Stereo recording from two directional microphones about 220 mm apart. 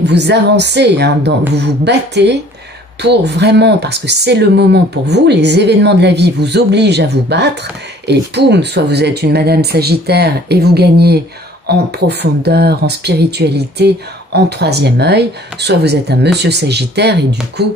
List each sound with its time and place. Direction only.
0.0 s speech: 50° right (ahead or behind)